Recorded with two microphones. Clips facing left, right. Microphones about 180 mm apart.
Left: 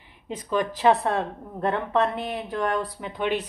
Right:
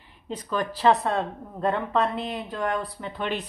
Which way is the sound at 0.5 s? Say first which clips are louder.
Left 1 dB; 15° left (ahead or behind).